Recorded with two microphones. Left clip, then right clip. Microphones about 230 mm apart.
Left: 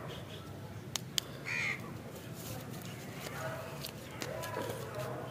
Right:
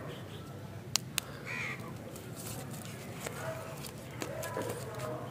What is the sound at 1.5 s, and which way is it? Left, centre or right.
Crow, left.